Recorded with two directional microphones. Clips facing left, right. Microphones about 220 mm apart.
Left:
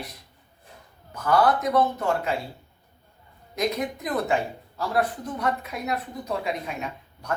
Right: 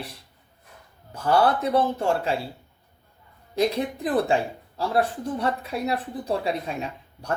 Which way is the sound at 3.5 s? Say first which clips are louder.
Right 3 dB; 30° right (ahead or behind).